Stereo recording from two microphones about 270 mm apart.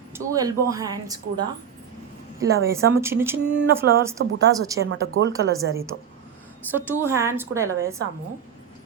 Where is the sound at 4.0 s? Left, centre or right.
Centre.